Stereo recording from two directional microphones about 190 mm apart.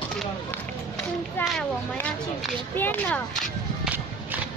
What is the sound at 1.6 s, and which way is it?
Speech, 5° left (ahead or behind).